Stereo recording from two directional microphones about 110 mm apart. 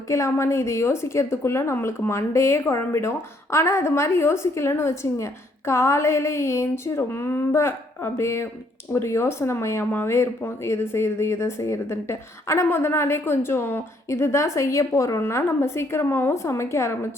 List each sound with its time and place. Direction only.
0.1 s a woman's voice: 25° left (ahead or behind)